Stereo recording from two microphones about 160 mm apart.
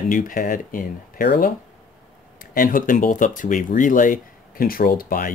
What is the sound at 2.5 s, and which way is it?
Speech, 60° left (ahead or behind).